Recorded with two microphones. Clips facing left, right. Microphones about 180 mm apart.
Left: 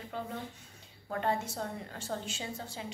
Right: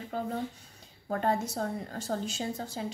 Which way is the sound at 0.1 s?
45° right (ahead or behind).